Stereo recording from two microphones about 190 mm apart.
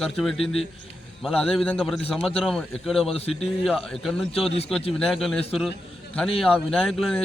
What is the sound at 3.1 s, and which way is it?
Speech, 30° left (ahead or behind).